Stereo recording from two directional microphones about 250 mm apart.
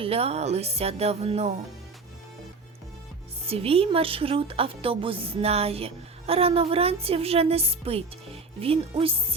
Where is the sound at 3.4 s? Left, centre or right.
Right.